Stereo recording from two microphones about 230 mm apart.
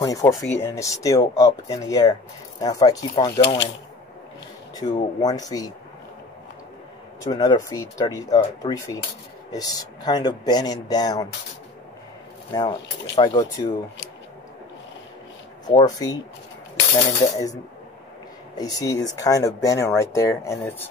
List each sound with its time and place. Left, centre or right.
0.0 s speech: centre
3.3 s speech: left
4.7 s speech: centre
7.2 s speech: centre
12.5 s speech: centre
15.7 s speech: centre
18.6 s speech: centre